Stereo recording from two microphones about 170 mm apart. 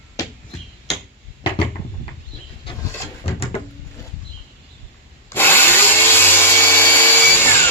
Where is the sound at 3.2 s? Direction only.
35° left (ahead or behind).